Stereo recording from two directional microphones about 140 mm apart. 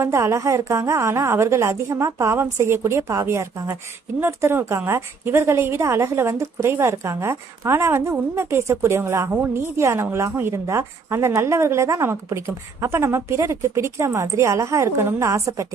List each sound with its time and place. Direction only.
0.0 s a woman's voice: 20° right (ahead or behind)